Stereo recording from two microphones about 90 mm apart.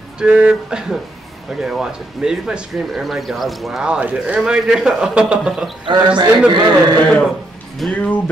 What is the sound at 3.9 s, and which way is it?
A man's voice, 15° right (ahead or behind).